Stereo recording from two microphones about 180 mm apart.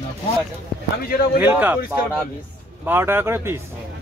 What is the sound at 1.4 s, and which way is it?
Speech, 10° right (ahead or behind).